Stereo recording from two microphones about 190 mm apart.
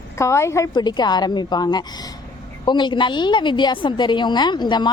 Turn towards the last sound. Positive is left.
turn(degrees=25)  # may be behind; listen again after turning